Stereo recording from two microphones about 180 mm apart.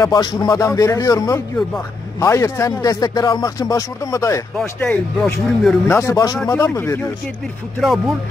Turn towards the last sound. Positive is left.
turn(degrees=0)  # may be behind; listen again after turning